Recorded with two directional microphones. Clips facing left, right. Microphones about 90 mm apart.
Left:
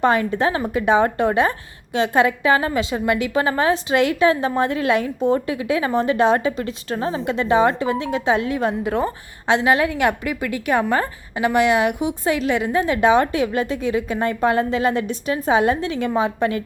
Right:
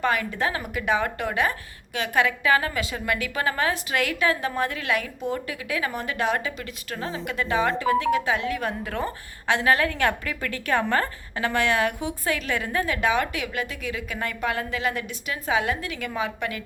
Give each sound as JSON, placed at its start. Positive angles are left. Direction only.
{"t": 0.0, "sound": "a woman's voice", "side_deg": 30}